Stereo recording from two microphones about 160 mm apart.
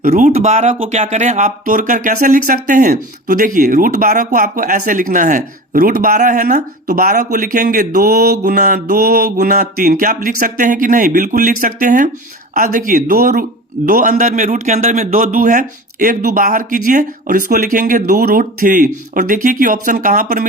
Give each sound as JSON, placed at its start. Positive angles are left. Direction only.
{"t": 0.0, "sound": "speech", "side_deg": -55}